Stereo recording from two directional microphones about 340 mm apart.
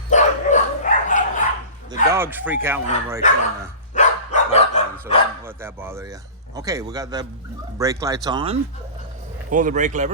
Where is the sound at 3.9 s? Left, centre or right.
Left.